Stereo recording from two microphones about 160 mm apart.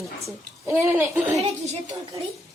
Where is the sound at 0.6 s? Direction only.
15° right (ahead or behind).